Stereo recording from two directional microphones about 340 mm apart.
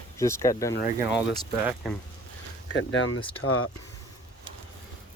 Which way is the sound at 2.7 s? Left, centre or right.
Left.